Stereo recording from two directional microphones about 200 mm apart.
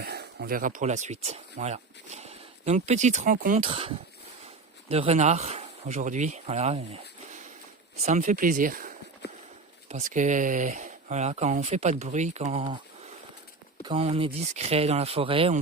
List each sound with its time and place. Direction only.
0.0 s speech: 55° right (ahead or behind)
3.6 s speech: 30° right (ahead or behind); by 8.9 s 45° right (ahead or behind)
9.2 s a sound: 55° left (ahead or behind)
9.9 s speech: 40° right (ahead or behind)
13.8 s speech: 30° right (ahead or behind)